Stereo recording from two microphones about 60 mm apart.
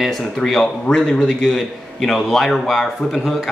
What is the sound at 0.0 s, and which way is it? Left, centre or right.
Speech, centre.